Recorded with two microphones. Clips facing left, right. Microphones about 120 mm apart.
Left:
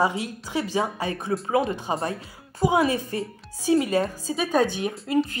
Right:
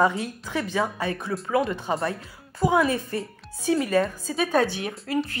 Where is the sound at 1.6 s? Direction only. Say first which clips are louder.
Even; 15° left (ahead or behind).